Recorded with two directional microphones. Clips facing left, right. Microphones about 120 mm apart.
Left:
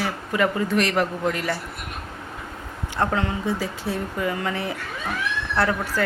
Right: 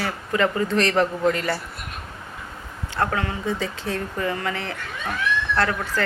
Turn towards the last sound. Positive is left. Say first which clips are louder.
# even
turn(degrees=10)  # may be behind; listen again after turning